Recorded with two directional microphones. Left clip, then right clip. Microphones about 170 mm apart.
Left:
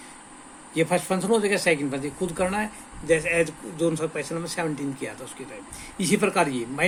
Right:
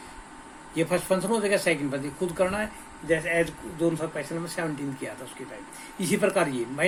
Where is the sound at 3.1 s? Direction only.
65° left (ahead or behind).